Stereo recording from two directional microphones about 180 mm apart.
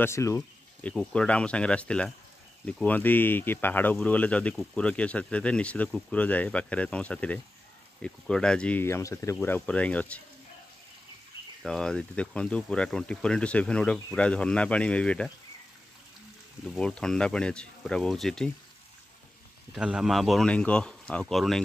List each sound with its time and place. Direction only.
0.0 s speech: 15° left (ahead or behind)
11.6 s speech: 5° left (ahead or behind)
16.6 s speech: 5° left (ahead or behind)
19.7 s speech: 5° right (ahead or behind)